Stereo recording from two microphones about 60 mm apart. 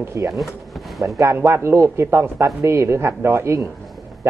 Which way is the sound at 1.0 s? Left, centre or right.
Right.